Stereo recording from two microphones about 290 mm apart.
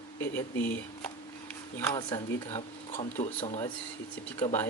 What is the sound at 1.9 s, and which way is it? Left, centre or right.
Speech, centre.